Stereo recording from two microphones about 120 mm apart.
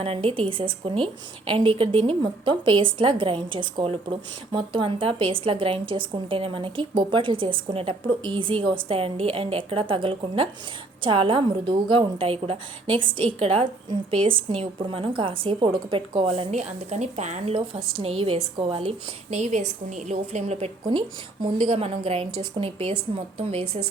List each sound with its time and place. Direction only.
0.0 s a woman's voice: 55° right (ahead or behind)
16.5 s a woman's voice: 70° right (ahead or behind)
18.0 s a woman's voice: 55° right (ahead or behind)
20.9 s speech: 35° right (ahead or behind)
21.6 s a woman's voice: 55° right (ahead or behind)